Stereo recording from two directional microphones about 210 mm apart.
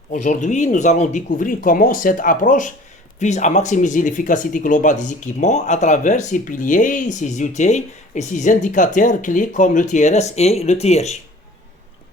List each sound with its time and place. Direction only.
0.1 s speech: 35° left (ahead or behind)